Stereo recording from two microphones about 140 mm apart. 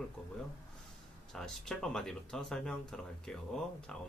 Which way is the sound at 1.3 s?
5° left (ahead or behind).